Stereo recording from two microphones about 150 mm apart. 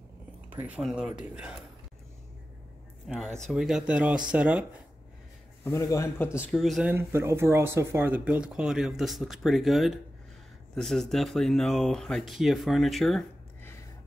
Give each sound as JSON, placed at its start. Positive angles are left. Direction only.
{"t": 0.5, "sound": "speech", "side_deg": -10}
{"t": 3.1, "sound": "speech", "side_deg": 0}
{"t": 5.7, "sound": "a man's voice", "side_deg": 25}
{"t": 6.4, "sound": "speech", "side_deg": 0}
{"t": 6.9, "sound": "speech", "side_deg": -15}